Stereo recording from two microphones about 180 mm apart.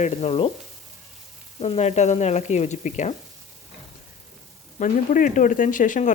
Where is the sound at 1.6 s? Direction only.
35° left (ahead or behind).